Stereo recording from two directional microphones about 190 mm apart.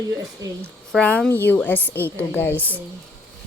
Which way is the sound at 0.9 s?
5° left (ahead or behind).